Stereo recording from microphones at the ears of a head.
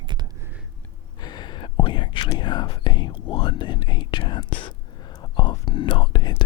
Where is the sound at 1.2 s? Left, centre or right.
Left.